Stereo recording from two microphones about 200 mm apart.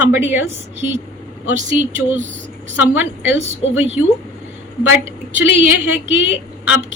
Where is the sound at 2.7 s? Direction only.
10° right (ahead or behind).